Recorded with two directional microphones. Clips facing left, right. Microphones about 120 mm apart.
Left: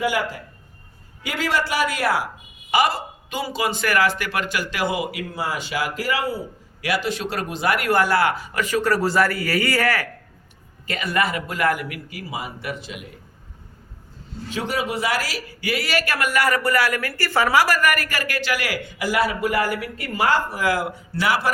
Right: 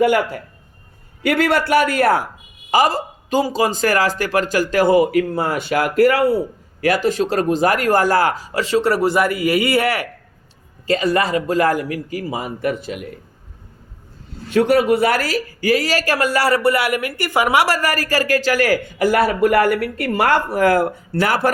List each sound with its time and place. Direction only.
0.0 s a man's voice: 55° right (ahead or behind)
2.6 s a man's voice: 40° right (ahead or behind); by 6.4 s 60° right (ahead or behind)
6.8 s speech: 45° right (ahead or behind)
14.5 s speech: 55° right (ahead or behind)